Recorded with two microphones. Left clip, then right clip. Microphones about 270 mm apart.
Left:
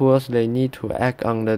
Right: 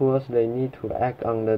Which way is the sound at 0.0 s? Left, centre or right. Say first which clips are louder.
Left 4 dB; left.